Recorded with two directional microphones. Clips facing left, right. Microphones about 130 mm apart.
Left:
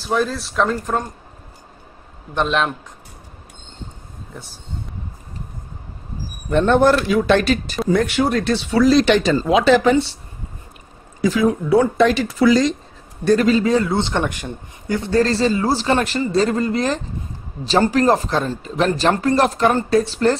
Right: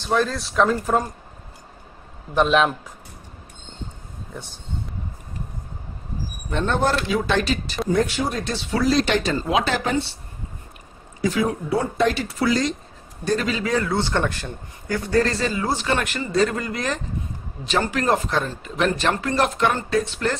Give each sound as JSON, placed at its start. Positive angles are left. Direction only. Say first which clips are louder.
{"t": 0.0, "sound": "speech", "louder": "left 1 dB", "side_deg": 5}
{"t": 2.3, "sound": "speech", "louder": "right 2 dB", "side_deg": 0}
{"t": 4.3, "sound": "speech", "louder": "right 1 dB", "side_deg": 0}
{"t": 6.5, "sound": "speech", "louder": "left 8 dB", "side_deg": 60}
{"t": 7.9, "sound": "speech", "louder": "left 5 dB", "side_deg": 75}
{"t": 11.2, "sound": "speech", "louder": "left 5 dB", "side_deg": 90}
{"t": 13.2, "sound": "speech", "louder": "left 7 dB", "side_deg": 55}
{"t": 13.5, "sound": "a man's voice", "louder": "left 7 dB", "side_deg": 30}